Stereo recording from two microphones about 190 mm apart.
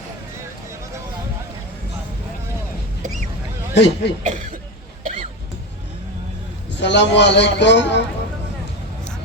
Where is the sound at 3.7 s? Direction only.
65° left (ahead or behind).